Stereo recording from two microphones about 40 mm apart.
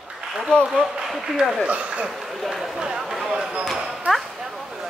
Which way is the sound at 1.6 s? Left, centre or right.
Right.